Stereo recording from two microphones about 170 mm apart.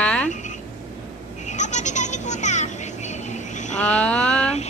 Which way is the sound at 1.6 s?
45° left (ahead or behind).